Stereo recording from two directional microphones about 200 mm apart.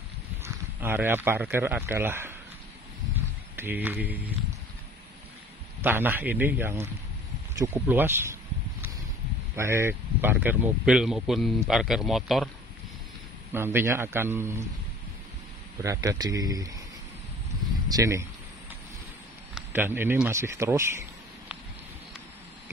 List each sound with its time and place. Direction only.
0.4 s speech: 10° right (ahead or behind)
3.5 s a man's voice: 10° right (ahead or behind)
5.8 s a man's voice: 10° right (ahead or behind)
9.6 s speech: 15° right (ahead or behind)
13.5 s a man's voice: 10° right (ahead or behind)
15.8 s a man's voice: 15° right (ahead or behind)
17.8 s speech: 15° right (ahead or behind)
19.5 s speech: 10° right (ahead or behind)